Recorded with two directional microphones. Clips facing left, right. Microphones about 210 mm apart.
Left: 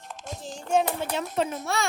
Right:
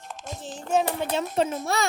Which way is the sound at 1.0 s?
25° right (ahead or behind).